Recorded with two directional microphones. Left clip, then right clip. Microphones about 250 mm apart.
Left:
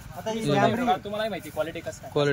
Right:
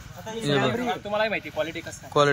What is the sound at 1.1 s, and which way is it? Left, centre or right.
A man's voice, centre.